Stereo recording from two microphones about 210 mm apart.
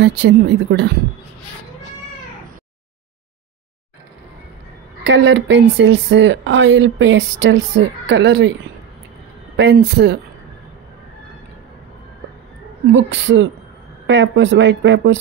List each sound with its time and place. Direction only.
0.0 s speech: 55° right (ahead or behind)
5.0 s speech: 60° right (ahead or behind)
9.6 s speech: 55° right (ahead or behind)
12.9 s speech: 65° right (ahead or behind)